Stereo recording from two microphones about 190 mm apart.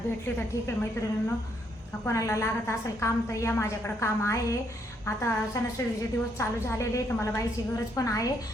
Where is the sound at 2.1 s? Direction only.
15° left (ahead or behind).